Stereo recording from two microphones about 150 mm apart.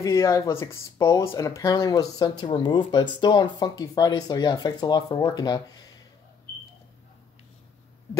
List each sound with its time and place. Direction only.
0.0 s speech: 20° left (ahead or behind)